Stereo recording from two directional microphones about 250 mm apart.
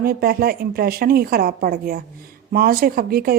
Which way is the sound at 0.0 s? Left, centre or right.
Right.